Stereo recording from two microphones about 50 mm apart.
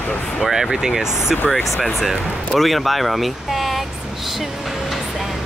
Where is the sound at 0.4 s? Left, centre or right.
Centre.